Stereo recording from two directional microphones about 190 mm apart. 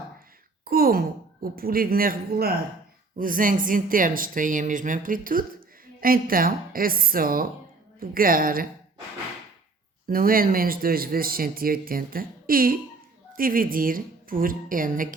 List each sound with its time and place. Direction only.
0.6 s a woman's voice: 50° right (ahead or behind)
10.1 s speech: 50° right (ahead or behind)